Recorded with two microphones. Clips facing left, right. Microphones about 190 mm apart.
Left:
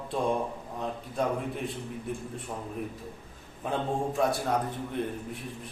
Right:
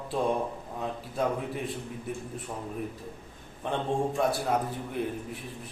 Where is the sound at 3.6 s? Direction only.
Centre (ahead or behind).